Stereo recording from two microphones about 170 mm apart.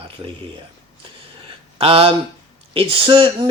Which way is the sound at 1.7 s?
35° right (ahead or behind).